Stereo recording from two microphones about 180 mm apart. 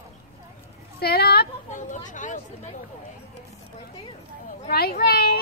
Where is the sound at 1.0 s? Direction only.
60° left (ahead or behind).